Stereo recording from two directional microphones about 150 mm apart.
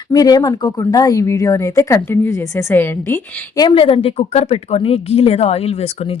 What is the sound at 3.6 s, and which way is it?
A woman's voice, 35° left (ahead or behind).